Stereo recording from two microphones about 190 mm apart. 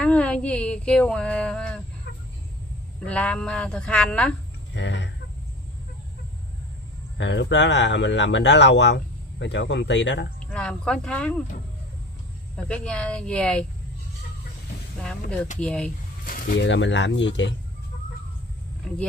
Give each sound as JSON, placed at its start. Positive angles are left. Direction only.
{"t": 0.0, "sound": "a sound", "side_deg": 5}
{"t": 3.0, "sound": "speech", "side_deg": 5}
{"t": 4.7, "sound": "speech", "side_deg": 70}
{"t": 7.2, "sound": "speech", "side_deg": 70}
{"t": 10.5, "sound": "speech", "side_deg": 5}
{"t": 12.6, "sound": "speech", "side_deg": 5}
{"t": 15.6, "sound": "a sound", "side_deg": 5}
{"t": 16.3, "sound": "a sound", "side_deg": 45}
{"t": 16.5, "sound": "speech", "side_deg": 70}